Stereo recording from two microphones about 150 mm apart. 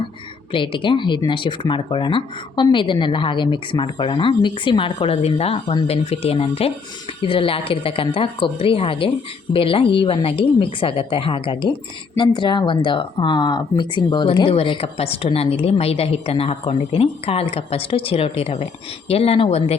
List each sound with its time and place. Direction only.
0.5 s speech: 35° left (ahead or behind)